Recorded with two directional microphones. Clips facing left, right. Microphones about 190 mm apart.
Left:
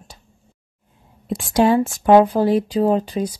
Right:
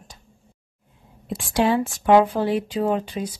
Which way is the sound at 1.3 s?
40° left (ahead or behind).